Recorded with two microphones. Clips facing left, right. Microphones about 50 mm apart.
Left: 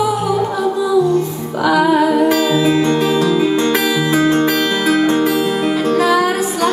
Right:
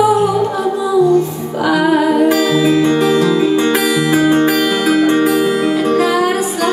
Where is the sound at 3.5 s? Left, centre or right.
Centre.